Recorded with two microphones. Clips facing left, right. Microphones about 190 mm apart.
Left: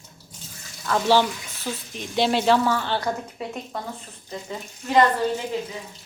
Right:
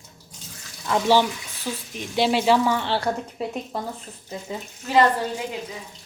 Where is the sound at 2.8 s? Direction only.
30° right (ahead or behind).